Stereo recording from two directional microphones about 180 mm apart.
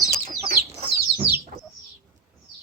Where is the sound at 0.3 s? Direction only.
55° right (ahead or behind).